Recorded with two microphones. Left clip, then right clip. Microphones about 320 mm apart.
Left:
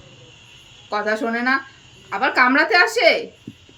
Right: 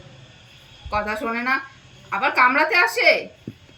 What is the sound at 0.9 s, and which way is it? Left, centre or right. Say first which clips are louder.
Speech: left 3 dB; centre.